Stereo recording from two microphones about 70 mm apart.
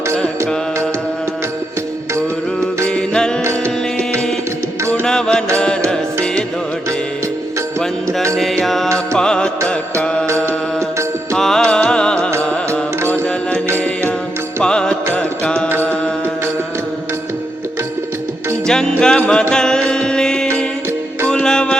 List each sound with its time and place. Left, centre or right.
2.8 s music: centre
5.0 s music: centre
8.6 s music: centre
10.4 s music: right
11.3 s music: centre; by 14.1 s left
14.6 s music: centre
18.6 s music: centre